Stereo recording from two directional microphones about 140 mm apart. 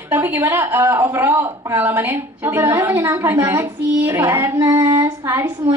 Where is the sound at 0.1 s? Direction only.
15° right (ahead or behind).